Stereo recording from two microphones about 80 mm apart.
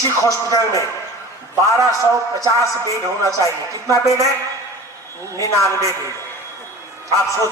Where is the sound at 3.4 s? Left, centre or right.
Left.